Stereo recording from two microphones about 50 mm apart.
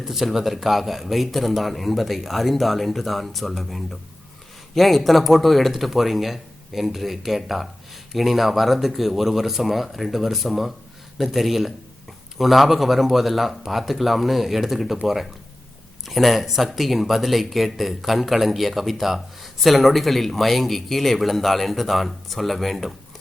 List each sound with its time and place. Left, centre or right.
0.0 s speech: centre